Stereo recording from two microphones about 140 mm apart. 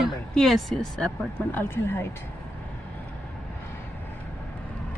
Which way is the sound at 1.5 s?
15° left (ahead or behind).